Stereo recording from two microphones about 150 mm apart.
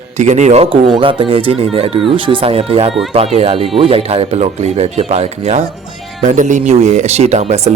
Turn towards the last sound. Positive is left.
turn(degrees=-45)  # may be behind; listen again after turning